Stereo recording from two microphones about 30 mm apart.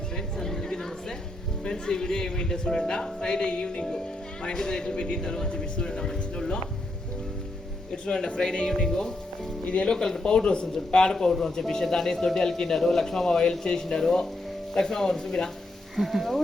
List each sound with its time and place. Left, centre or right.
0.3 s a sound: centre
1.6 s speech: centre
8.0 s a man's voice: left
16.0 s speech: centre